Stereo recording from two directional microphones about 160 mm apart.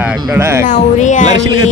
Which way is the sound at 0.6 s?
50° left (ahead or behind).